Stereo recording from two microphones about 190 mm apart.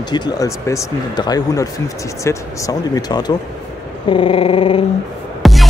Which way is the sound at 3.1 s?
20° left (ahead or behind).